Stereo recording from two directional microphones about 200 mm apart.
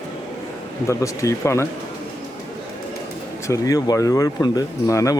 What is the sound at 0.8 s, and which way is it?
Speech, 15° left (ahead or behind).